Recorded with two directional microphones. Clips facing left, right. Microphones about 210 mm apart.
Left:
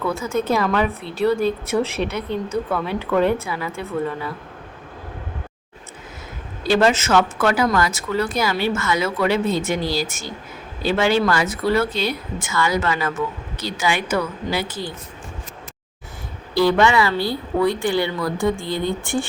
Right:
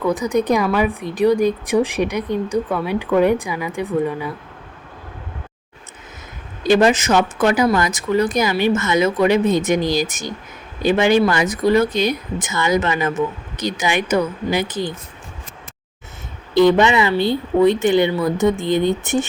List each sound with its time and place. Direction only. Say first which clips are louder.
0.0 s a woman's voice: right 4 dB; 15° right (ahead or behind)
6.6 s a woman's voice: right 3 dB; 15° right (ahead or behind)
16.6 s speech: right 3 dB; 20° right (ahead or behind)